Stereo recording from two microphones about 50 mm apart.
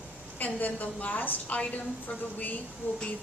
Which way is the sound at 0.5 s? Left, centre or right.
Left.